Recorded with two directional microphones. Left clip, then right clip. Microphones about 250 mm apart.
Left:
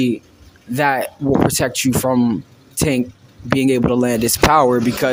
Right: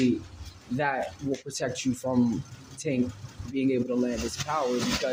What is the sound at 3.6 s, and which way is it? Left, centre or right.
Speech, left.